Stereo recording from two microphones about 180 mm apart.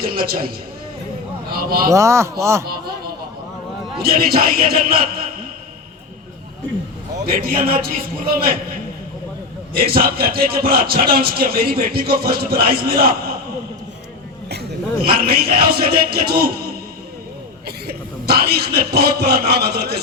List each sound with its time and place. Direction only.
0.0 s a man's voice: 55° right (ahead or behind)
1.9 s speech: 15° right (ahead or behind)
4.0 s a man's voice: 55° right (ahead or behind)
7.3 s a man's voice: 55° right (ahead or behind)
9.7 s a man's voice: 55° right (ahead or behind)
14.5 s a man's voice: 60° right (ahead or behind)
17.7 s a man's voice: 60° right (ahead or behind)